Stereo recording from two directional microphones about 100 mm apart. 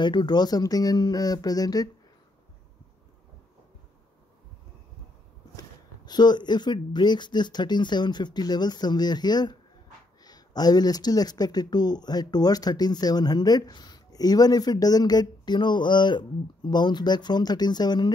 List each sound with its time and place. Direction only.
0.0 s speech: 50° left (ahead or behind)
5.6 s speech: 45° left (ahead or behind)